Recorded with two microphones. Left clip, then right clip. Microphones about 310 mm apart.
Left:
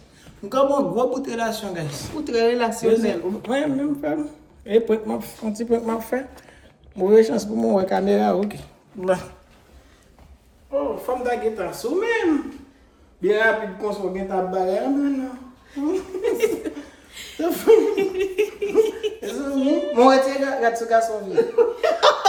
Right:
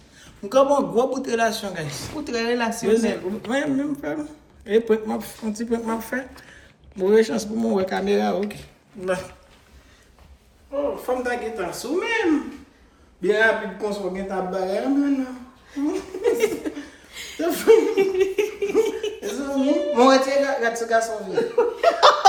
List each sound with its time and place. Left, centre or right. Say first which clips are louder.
0.5 s speech: right 2 dB; centre
2.2 s speech: left 4 dB; centre
3.5 s speech: left 1 dB; centre
11.0 s speech: left 2 dB; centre
13.2 s speech: even; centre
15.8 s speech: left 2 dB; centre
17.1 s chuckle: even; centre
17.4 s speech: even; centre
17.9 s speech: right 2 dB; centre
21.2 s speech: left 3 dB; centre